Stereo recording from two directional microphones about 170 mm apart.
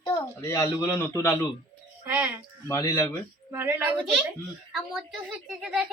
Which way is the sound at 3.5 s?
15° right (ahead or behind).